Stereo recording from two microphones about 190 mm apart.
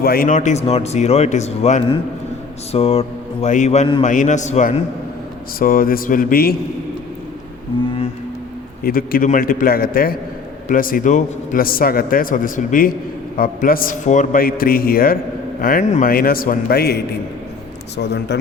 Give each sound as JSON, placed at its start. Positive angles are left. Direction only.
{"t": 0.0, "sound": "speech", "side_deg": 50}
{"t": 5.5, "sound": "a man's voice", "side_deg": 50}
{"t": 8.8, "sound": "a man's voice", "side_deg": 50}
{"t": 16.0, "sound": "a man's voice", "side_deg": 50}